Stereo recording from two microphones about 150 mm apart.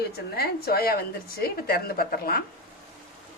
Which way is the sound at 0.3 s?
90° left.